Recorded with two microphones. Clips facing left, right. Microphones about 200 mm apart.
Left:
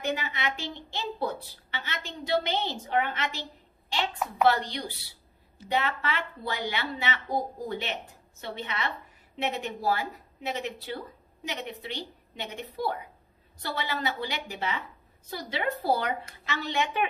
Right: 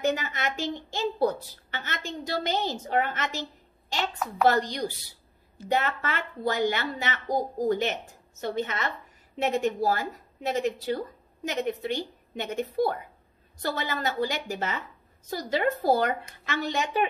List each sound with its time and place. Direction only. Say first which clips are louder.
0.0 s a woman's voice: right 4 dB; 45° right (ahead or behind)